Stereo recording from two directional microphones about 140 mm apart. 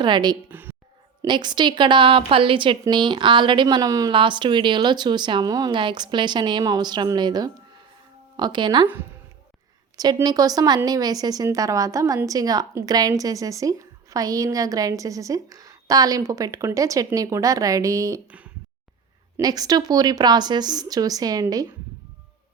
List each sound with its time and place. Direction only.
0.0 s speech: 30° right (ahead or behind)
0.4 s a sound: 15° right (ahead or behind)
1.2 s speech: 30° right (ahead or behind)
4.1 s speech: 35° right (ahead or behind)
10.2 s a woman's voice: 25° right (ahead or behind)
18.3 s speech: 10° right (ahead or behind)
19.4 s a woman's voice: 25° right (ahead or behind)